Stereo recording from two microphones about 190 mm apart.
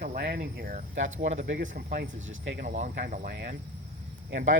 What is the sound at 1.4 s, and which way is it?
Speech, 65° right (ahead or behind).